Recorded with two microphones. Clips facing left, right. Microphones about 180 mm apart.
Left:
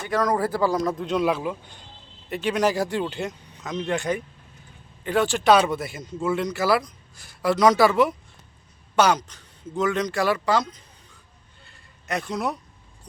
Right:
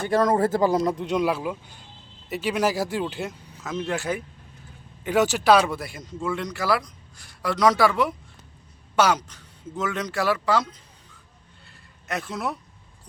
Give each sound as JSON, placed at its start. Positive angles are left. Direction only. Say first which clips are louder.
{"t": 0.1, "sound": "speech", "louder": "right 2 dB", "side_deg": -25}
{"t": 1.2, "sound": "speech", "louder": "left 1 dB", "side_deg": -5}
{"t": 11.6, "sound": "a sound", "louder": "left 2 dB", "side_deg": 0}